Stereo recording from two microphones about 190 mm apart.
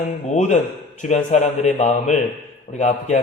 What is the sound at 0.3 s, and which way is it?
A man's voice, 35° left (ahead or behind).